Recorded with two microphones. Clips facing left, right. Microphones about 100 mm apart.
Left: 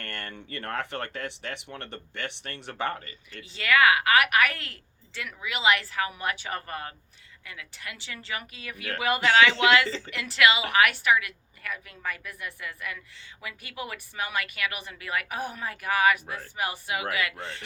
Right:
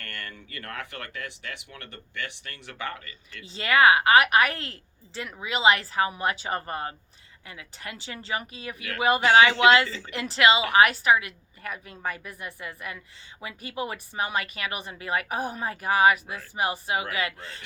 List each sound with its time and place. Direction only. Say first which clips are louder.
0.0 s speech: left 2 dB; 30° left (ahead or behind)
3.5 s a woman's voice: right 2 dB; 30° right (ahead or behind)